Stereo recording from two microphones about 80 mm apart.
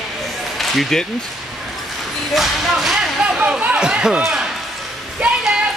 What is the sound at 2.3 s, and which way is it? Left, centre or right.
Speech, centre.